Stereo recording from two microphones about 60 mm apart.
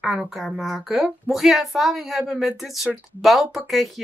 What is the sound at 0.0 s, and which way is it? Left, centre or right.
A woman's voice, centre.